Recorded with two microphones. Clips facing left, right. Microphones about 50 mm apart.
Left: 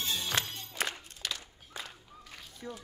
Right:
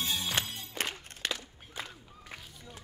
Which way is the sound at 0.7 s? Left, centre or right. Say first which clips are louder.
Left 1 dB; right.